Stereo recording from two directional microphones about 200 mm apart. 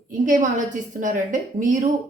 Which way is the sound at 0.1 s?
40° right (ahead or behind).